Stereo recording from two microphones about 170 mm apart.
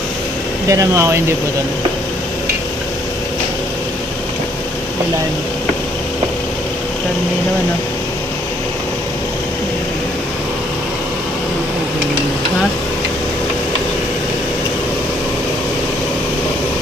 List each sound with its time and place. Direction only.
0.7 s speech: 15° right (ahead or behind)